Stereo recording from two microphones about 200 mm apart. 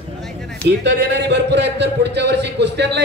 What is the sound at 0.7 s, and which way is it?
A man's voice, 60° right (ahead or behind).